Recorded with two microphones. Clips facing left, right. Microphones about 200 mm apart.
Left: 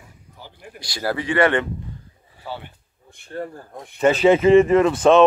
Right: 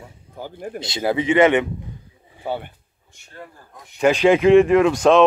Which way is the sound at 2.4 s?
55° right (ahead or behind).